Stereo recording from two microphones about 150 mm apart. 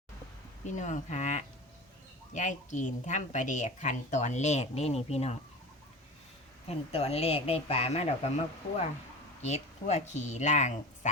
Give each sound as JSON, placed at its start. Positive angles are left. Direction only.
{"t": 0.6, "sound": "speech", "side_deg": 55}
{"t": 6.7, "sound": "speech", "side_deg": 40}